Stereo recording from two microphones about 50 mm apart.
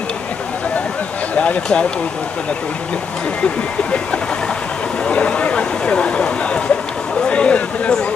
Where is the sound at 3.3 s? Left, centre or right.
Left.